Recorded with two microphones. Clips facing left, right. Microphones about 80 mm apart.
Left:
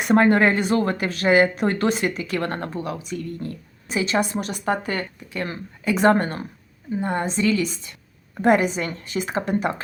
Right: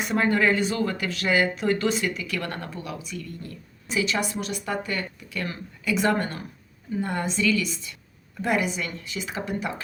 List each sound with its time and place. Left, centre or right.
0.0 s speech: left